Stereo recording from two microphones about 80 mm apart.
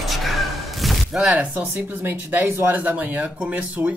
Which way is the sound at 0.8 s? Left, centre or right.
Centre.